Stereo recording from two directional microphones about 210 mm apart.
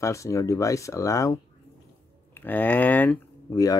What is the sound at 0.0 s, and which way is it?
Speech, 15° left (ahead or behind).